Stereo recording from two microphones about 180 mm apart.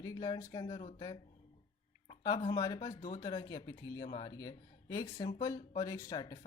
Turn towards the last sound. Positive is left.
turn(degrees=20)  # may be behind; listen again after turning